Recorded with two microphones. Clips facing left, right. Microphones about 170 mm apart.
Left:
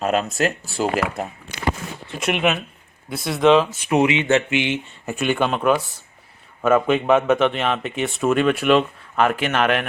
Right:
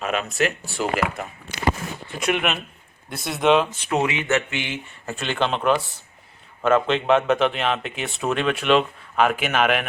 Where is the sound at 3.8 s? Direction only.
15° left (ahead or behind).